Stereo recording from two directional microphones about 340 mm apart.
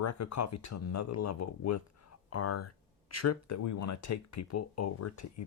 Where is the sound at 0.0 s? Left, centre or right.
Left.